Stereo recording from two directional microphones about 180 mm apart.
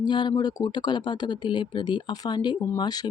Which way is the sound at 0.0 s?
25° left (ahead or behind).